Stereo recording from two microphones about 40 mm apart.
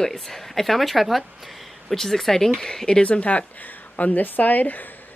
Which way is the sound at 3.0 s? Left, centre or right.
Left.